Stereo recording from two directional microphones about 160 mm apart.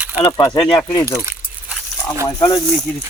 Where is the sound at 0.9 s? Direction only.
20° left (ahead or behind).